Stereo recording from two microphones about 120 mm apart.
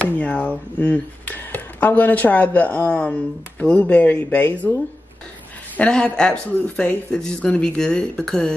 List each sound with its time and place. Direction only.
0.0 s speech: 10° left (ahead or behind)
5.8 s speech: 10° left (ahead or behind)